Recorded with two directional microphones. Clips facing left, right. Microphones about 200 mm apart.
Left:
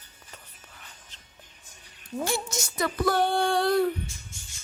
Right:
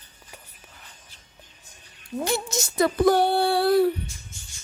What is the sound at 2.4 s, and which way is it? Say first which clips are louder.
Speech: right 7 dB; 25° right (ahead or behind).